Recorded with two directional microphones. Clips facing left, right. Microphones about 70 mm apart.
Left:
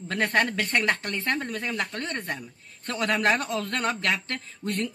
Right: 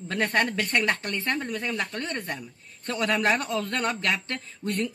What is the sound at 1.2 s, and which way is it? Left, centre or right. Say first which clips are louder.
Speech: left 1 dB; left.